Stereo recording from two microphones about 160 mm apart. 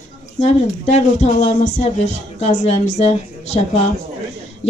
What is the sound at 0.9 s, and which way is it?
A woman's voice, 45° left (ahead or behind).